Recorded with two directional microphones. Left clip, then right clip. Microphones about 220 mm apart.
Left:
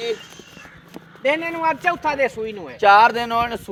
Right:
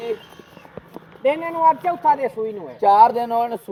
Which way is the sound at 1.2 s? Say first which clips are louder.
Right 3 dB; 10° right (ahead or behind).